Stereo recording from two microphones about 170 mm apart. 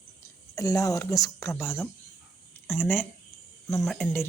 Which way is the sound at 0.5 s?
20° left (ahead or behind).